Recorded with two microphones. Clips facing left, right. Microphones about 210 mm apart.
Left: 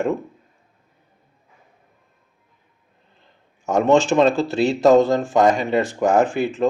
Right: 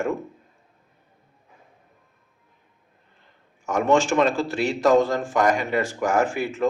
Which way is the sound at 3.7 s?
20° left (ahead or behind).